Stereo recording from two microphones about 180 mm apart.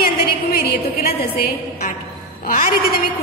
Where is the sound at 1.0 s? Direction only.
60° left (ahead or behind).